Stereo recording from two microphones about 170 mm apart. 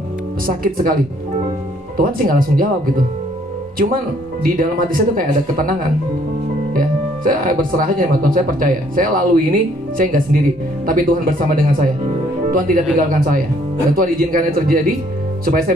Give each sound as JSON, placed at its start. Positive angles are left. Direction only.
{"t": 0.5, "sound": "speech", "side_deg": -55}
{"t": 2.0, "sound": "speech", "side_deg": -55}
{"t": 3.7, "sound": "speech", "side_deg": -55}